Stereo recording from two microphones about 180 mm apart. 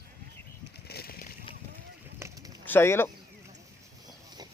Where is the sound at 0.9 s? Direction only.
60° left (ahead or behind).